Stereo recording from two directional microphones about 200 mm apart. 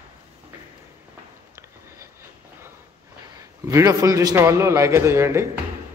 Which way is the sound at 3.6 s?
15° right (ahead or behind).